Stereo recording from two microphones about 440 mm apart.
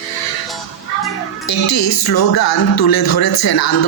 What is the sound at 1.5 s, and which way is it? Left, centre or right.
Speech, left.